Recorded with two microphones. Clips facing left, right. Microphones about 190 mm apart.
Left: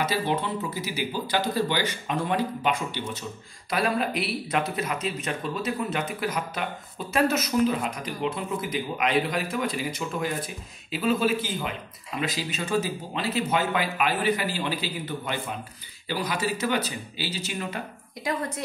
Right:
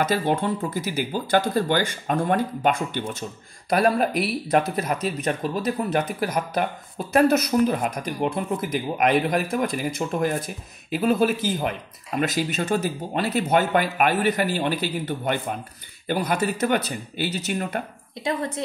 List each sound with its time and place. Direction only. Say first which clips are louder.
0.0 s speech: right 4 dB; 50° right (ahead or behind)